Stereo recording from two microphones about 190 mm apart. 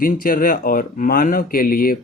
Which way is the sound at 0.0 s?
50° left (ahead or behind).